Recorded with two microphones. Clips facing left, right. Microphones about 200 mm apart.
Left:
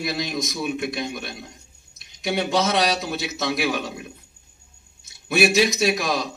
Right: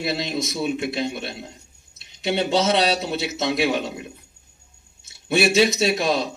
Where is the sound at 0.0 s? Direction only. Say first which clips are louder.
Right 1 dB; 25° right (ahead or behind).